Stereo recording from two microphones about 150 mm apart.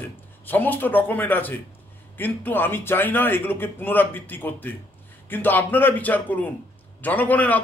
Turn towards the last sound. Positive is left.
turn(degrees=10)  # may be behind; listen again after turning